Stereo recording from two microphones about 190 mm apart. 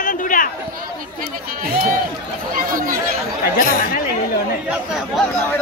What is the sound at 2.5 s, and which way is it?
Speech, 45° right (ahead or behind).